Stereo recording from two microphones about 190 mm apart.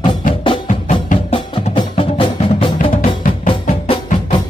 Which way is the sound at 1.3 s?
25° left (ahead or behind).